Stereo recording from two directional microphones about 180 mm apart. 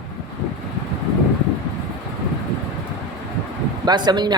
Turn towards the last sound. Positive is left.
turn(degrees=-25)  # may be behind; listen again after turning